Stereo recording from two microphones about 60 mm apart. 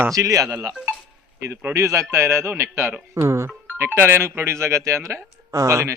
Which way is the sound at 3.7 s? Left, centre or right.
Right.